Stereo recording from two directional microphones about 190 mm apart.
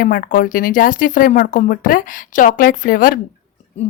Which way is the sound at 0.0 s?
45° left (ahead or behind).